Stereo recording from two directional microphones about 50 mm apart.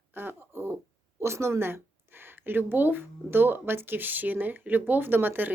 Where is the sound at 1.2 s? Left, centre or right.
Right.